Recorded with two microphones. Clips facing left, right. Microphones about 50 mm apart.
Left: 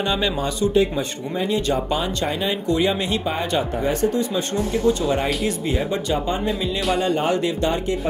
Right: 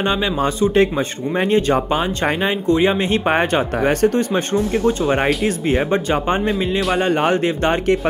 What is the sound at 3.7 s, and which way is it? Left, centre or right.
Speech, right.